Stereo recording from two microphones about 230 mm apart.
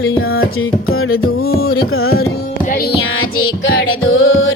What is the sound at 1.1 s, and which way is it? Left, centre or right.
Music, left.